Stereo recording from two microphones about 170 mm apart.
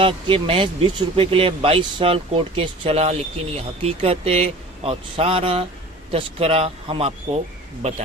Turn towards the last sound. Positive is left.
turn(degrees=-40)  # may be behind; listen again after turning